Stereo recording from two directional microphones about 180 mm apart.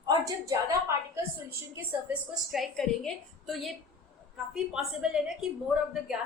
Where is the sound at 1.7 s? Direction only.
10° right (ahead or behind).